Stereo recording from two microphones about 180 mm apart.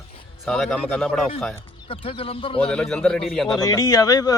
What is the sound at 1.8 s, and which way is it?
Speech, 30° left (ahead or behind).